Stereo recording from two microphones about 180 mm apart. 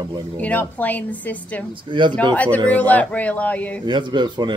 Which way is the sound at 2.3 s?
10° left (ahead or behind).